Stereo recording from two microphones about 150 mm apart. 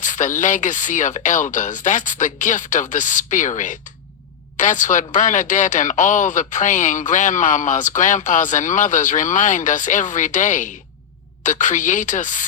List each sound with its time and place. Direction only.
0.0 s speech: 55° left (ahead or behind)